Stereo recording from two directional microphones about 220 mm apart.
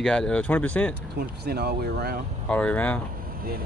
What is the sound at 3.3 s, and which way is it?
Vehicle, 40° right (ahead or behind).